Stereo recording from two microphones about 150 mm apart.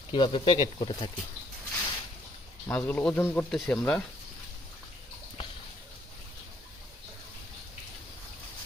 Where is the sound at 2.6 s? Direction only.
10° left (ahead or behind).